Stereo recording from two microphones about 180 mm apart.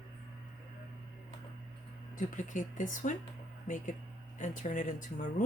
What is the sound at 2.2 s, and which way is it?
Speech, 45° left (ahead or behind).